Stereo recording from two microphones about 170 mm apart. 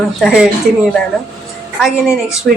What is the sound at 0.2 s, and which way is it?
Speech, 5° right (ahead or behind).